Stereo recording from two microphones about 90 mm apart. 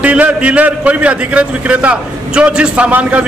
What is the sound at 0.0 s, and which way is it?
A man's voice, 15° right (ahead or behind).